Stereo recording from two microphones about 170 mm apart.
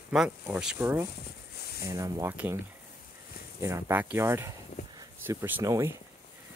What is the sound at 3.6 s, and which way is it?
Speech, 15° right (ahead or behind).